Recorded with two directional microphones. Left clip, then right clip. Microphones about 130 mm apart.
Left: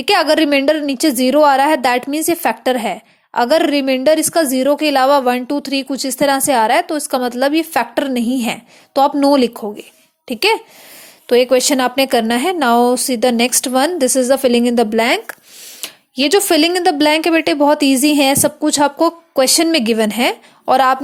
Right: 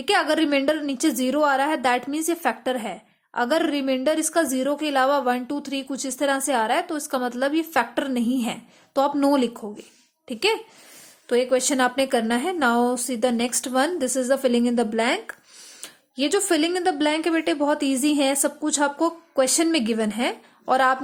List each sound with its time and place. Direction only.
0.0 s a woman's voice: 35° left (ahead or behind)